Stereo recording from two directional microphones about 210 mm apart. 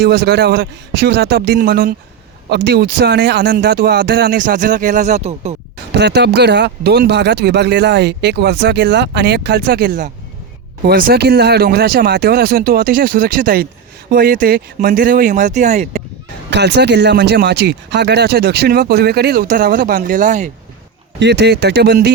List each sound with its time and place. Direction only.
0.0 s speech: 50° right (ahead or behind); by 5.5 s 30° right (ahead or behind)
5.9 s speech: 55° right (ahead or behind); by 16.0 s 30° right (ahead or behind)
16.5 s speech: 55° right (ahead or behind); by 20.5 s 35° right (ahead or behind)
21.2 s speech: 55° right (ahead or behind)